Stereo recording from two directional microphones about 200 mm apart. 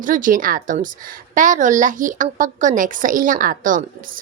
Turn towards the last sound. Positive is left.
turn(degrees=-40)  # may be behind; listen again after turning